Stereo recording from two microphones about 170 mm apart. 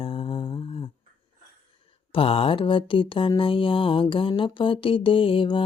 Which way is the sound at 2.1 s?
35° left (ahead or behind).